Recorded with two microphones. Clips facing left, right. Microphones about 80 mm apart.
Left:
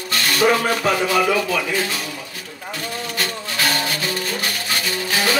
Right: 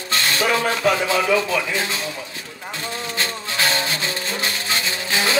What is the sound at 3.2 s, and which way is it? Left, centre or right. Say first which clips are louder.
Music: even; right.